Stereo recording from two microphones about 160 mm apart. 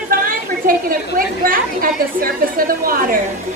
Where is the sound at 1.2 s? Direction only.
60° right (ahead or behind).